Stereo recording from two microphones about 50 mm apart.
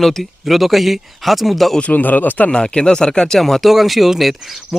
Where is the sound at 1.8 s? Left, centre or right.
Left.